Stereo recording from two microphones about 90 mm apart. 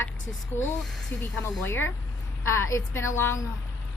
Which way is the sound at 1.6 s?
25° left (ahead or behind).